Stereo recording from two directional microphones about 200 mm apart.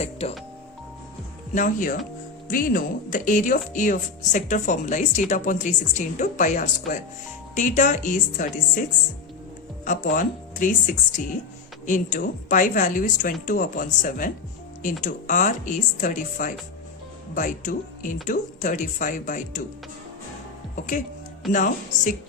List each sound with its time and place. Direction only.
0.0 s speech: 30° left (ahead or behind)
1.5 s speech: 40° left (ahead or behind)
9.8 s speech: 40° left (ahead or behind)
20.7 s speech: 40° left (ahead or behind)